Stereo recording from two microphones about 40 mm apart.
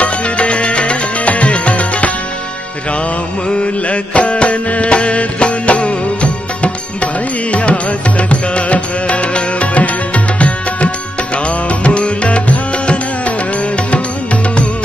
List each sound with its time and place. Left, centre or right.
0.0 s music: left
3.4 s music: left